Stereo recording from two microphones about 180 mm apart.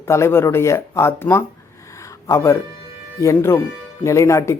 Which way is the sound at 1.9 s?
15° left (ahead or behind).